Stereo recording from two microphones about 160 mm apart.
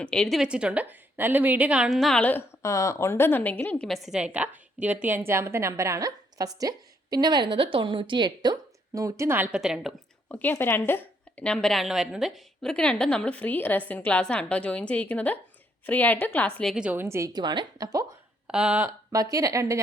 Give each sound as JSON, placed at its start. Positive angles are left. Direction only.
{"t": 0.0, "sound": "a woman's voice", "side_deg": 5}
{"t": 10.2, "sound": "a woman's voice", "side_deg": 10}
{"t": 16.7, "sound": "a woman's voice", "side_deg": -10}
{"t": 18.4, "sound": "speech", "side_deg": -5}
{"t": 19.1, "sound": "a woman's voice", "side_deg": -20}